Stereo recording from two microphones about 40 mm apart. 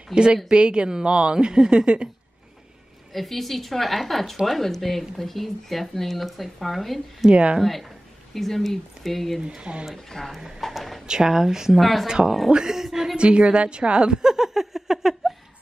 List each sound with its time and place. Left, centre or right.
0.1 s a woman's voice: right
3.1 s speech: centre
7.2 s a woman's voice: right
8.4 s speech: centre
9.6 s a woman's voice: right
10.0 s speech: centre
10.3 s speech: centre
11.1 s speech: centre
11.8 s speech: centre
12.6 s speech: centre
13.2 s a woman's voice: right
14.2 s a sound: centre